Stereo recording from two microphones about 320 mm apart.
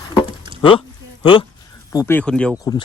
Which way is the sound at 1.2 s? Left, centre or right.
Centre.